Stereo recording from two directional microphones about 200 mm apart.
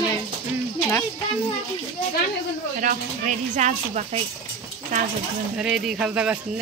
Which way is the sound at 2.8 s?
40° right (ahead or behind).